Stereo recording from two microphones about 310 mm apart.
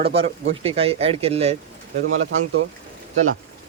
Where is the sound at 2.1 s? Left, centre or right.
Right.